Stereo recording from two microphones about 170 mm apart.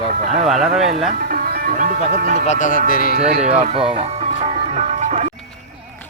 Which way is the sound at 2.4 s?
45° left (ahead or behind).